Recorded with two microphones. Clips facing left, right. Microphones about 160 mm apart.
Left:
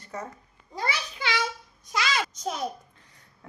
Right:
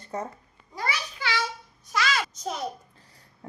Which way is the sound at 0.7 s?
25° left (ahead or behind).